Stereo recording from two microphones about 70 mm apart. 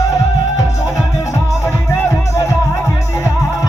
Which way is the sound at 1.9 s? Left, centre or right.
Left.